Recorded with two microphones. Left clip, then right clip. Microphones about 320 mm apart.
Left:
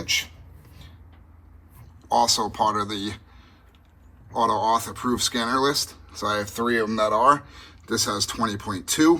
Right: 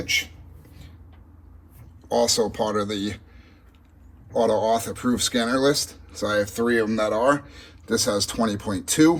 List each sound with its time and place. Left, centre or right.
2.0 s speech: centre
4.4 s speech: centre